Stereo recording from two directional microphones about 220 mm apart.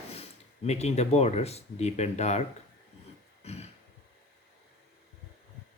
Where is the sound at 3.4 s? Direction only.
30° left (ahead or behind).